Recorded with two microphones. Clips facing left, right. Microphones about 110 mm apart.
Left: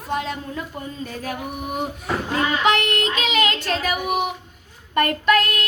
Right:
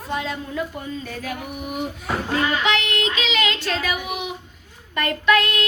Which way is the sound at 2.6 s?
45° left (ahead or behind).